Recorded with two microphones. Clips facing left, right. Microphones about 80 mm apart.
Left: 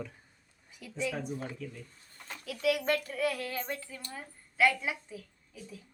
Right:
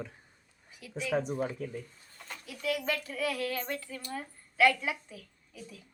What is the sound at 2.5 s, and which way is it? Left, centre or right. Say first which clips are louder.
Speech: left 4 dB; left.